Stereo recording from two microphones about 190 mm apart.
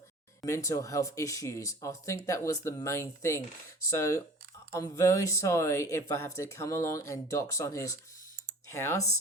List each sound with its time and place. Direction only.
0.4 s speech: 15° left (ahead or behind)